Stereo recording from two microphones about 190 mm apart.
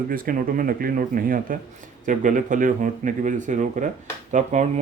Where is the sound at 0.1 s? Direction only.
45° right (ahead or behind).